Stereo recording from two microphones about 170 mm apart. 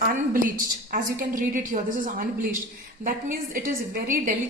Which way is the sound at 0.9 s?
55° right (ahead or behind).